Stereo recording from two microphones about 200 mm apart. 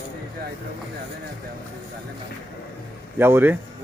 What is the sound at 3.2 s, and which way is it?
Speech, 10° right (ahead or behind).